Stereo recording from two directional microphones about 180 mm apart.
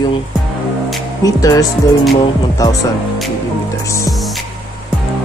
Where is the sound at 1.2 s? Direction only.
20° left (ahead or behind).